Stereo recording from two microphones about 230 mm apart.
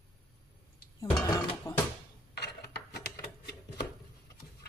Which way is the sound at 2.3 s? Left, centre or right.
Left.